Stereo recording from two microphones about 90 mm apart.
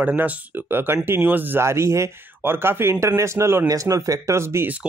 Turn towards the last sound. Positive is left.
turn(degrees=-30)  # may be behind; listen again after turning